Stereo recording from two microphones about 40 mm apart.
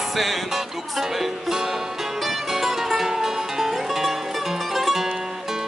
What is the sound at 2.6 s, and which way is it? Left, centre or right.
Music, centre.